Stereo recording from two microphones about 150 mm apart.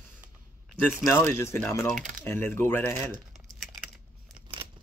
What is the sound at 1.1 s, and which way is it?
Speech, 15° left (ahead or behind).